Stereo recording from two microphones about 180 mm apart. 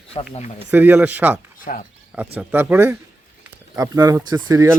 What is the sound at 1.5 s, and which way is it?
Speech, 50° left (ahead or behind).